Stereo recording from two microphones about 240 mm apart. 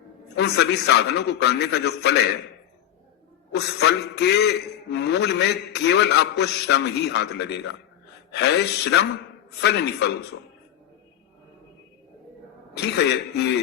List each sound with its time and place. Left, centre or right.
0.3 s a man's voice: left
3.5 s a man's voice: left
12.7 s a man's voice: left